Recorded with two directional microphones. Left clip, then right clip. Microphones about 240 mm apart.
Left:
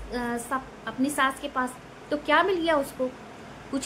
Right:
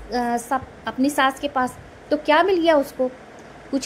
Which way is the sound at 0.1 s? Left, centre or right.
Centre.